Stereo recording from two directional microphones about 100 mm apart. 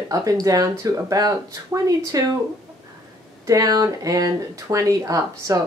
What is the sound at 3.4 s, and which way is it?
Speech, 35° right (ahead or behind).